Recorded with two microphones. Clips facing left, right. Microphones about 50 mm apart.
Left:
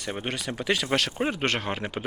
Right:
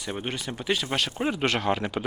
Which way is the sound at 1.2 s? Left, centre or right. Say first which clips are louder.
Right 1 dB; left.